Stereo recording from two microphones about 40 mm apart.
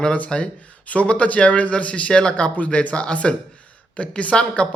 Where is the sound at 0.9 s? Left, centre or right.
Left.